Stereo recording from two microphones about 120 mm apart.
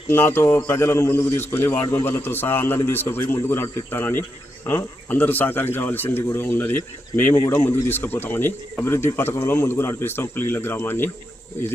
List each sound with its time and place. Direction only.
0.1 s a man's voice: 20° left (ahead or behind)